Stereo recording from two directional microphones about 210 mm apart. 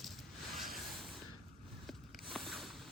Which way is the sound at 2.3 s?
Centre (ahead or behind).